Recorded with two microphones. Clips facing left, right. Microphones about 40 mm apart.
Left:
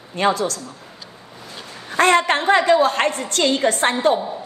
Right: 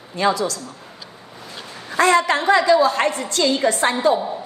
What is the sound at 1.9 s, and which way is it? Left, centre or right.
A woman's voice, left.